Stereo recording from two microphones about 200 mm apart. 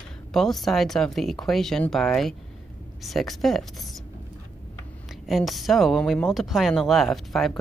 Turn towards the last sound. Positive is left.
turn(degrees=0)  # may be behind; listen again after turning